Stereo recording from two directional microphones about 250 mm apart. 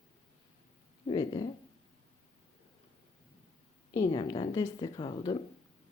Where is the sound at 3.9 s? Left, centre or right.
Centre.